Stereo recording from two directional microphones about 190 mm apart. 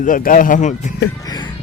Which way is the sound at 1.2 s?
20° left (ahead or behind).